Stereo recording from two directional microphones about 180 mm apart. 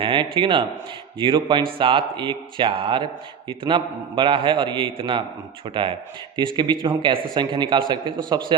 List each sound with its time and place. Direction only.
0.0 s a man's voice: 25° right (ahead or behind)